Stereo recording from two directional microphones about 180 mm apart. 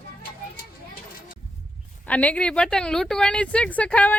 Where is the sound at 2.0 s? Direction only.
10° left (ahead or behind).